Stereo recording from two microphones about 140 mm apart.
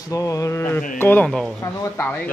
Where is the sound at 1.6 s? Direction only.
15° left (ahead or behind).